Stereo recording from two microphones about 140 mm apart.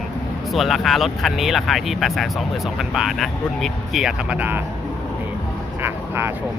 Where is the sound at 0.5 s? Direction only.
Centre (ahead or behind).